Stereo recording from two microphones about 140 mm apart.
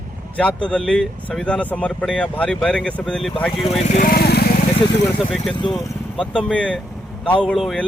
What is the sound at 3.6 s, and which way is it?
Speech, 50° left (ahead or behind).